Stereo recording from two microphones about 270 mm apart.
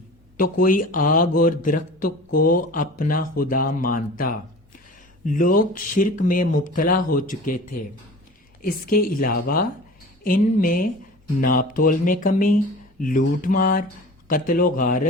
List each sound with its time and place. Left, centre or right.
0.3 s speech: left